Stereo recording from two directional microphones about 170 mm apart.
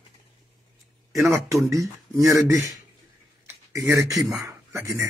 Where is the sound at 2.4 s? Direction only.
20° right (ahead or behind).